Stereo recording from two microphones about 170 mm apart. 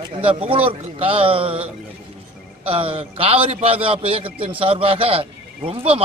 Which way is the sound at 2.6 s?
35° right (ahead or behind).